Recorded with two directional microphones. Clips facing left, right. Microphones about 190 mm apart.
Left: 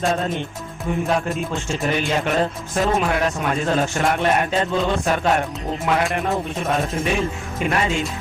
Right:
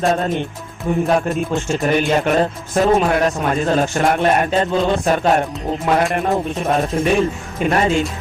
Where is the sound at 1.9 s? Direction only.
50° right (ahead or behind).